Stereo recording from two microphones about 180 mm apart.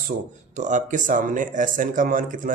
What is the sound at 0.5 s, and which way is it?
A man's voice, 40° right (ahead or behind).